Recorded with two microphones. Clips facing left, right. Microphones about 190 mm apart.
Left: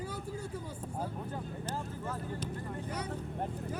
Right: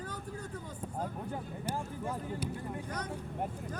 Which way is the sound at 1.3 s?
15° right (ahead or behind).